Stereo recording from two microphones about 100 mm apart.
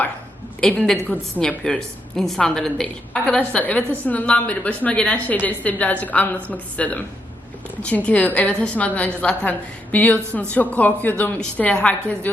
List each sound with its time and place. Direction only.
0.6 s a woman's voice: 5° left (ahead or behind)